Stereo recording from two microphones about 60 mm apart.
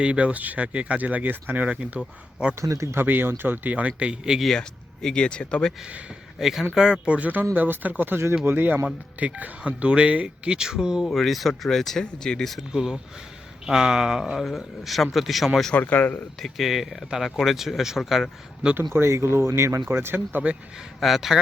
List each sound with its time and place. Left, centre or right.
0.0 s speech: centre
2.6 s speech: right
2.9 s speech: right; by 4.4 s centre
5.0 s speech: centre
6.4 s speech: centre
11.0 s speech: centre
12.7 s speech: centre
14.4 s speech: centre
15.7 s speech: left
16.4 s speech: centre
18.9 s speech: right
21.0 s speech: centre